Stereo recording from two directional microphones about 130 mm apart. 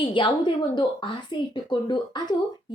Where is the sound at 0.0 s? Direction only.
40° left (ahead or behind).